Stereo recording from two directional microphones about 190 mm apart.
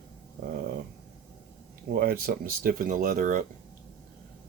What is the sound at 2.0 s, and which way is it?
Speech, 55° right (ahead or behind).